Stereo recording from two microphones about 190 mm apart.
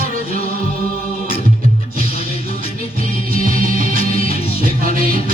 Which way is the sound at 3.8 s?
45° right (ahead or behind).